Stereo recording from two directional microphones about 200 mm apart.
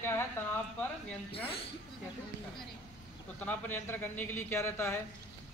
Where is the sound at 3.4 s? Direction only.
10° left (ahead or behind).